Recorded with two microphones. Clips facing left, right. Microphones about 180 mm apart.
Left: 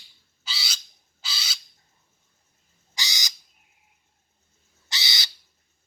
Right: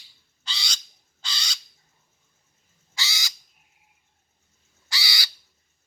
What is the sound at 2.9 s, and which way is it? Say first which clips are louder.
Bird: right 1 dB; 15° left (ahead or behind).